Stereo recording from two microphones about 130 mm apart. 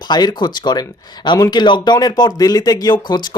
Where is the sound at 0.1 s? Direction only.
30° left (ahead or behind).